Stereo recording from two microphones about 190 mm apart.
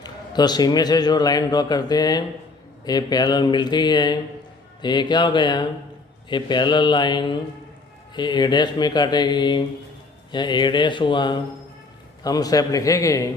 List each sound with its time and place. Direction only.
0.0 s a man's voice: 20° left (ahead or behind)